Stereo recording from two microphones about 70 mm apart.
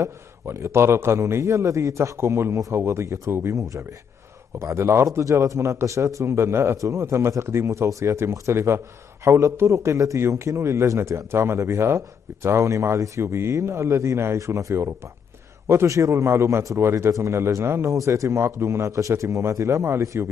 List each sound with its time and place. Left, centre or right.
0.0 s a man's voice: right